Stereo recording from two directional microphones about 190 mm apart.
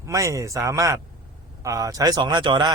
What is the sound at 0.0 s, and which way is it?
A man's voice, 15° right (ahead or behind).